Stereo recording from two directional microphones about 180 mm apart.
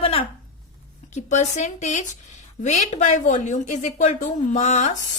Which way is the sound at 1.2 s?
40° left (ahead or behind).